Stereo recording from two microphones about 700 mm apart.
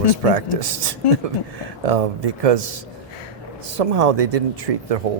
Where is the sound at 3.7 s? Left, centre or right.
Right.